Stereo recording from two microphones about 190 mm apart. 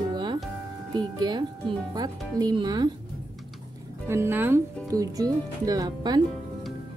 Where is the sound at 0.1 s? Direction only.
20° right (ahead or behind).